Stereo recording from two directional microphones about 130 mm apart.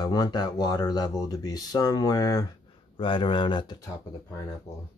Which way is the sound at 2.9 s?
40° left (ahead or behind).